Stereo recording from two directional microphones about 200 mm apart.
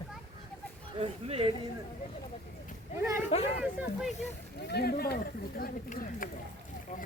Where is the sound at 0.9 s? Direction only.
30° right (ahead or behind).